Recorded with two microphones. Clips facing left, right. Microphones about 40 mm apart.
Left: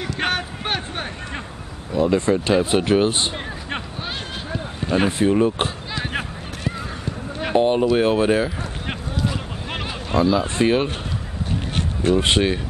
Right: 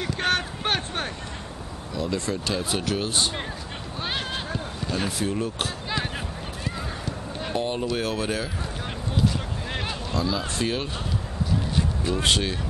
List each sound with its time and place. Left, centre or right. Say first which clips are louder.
0.3 s a sound: left 1 dB; centre
1.9 s speech: left 10 dB; left
4.7 s speech: left 10 dB; left
7.5 s speech: left 10 dB; left
10.1 s speech: left 9 dB; left
12.1 s speech: left 8 dB; left